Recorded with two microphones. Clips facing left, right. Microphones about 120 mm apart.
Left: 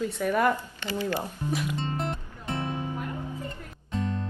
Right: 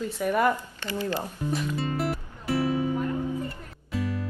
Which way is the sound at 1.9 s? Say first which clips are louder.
Right 3 dB; 5° right (ahead or behind).